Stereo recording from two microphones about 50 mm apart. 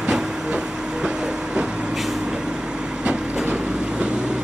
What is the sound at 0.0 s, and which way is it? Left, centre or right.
Train, centre.